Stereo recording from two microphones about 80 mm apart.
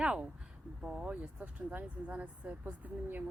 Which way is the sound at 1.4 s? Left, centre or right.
Centre.